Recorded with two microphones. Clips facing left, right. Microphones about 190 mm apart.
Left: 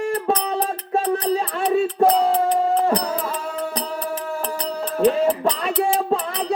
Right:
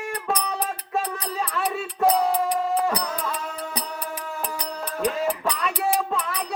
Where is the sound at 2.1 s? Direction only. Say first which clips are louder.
Left 4 dB; 10° right (ahead or behind).